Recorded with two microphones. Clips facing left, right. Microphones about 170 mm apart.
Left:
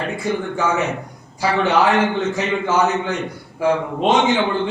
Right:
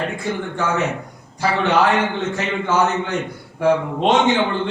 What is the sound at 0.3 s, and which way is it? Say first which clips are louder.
Speech: left 4 dB; 15° left (ahead or behind).